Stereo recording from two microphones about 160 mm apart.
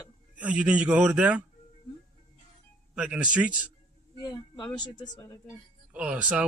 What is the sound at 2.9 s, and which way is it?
Speech, 10° right (ahead or behind).